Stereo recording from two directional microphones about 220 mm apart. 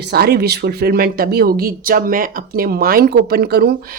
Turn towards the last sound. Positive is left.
turn(degrees=-45)  # may be behind; listen again after turning